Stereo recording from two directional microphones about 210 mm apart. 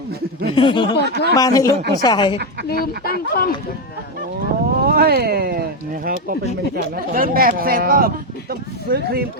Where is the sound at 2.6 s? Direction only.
45° left (ahead or behind).